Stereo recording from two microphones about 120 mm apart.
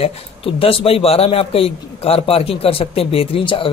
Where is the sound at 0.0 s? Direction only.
50° left (ahead or behind).